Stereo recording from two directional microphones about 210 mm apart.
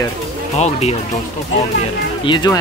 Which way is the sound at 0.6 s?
30° left (ahead or behind).